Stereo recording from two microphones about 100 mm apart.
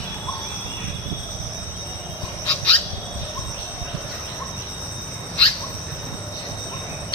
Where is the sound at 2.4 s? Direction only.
15° left (ahead or behind).